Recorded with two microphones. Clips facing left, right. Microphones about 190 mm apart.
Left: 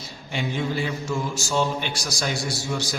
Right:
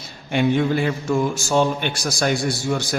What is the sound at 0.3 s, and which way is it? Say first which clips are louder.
A man's voice: right 8 dB; 55° right (ahead or behind).